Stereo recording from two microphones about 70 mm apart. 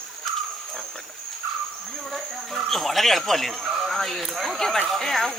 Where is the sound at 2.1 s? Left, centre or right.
Centre.